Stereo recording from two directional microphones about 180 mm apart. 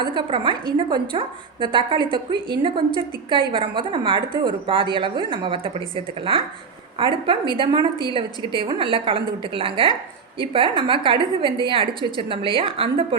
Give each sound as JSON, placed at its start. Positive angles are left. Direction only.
{"t": 0.0, "sound": "a woman's voice", "side_deg": -25}